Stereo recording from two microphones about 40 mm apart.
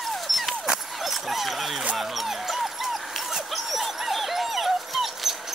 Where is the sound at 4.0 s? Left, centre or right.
Centre.